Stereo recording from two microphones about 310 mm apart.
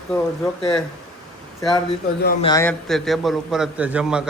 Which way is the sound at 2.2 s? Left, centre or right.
Left.